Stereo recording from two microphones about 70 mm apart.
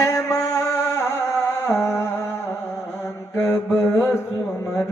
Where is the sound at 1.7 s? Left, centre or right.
Left.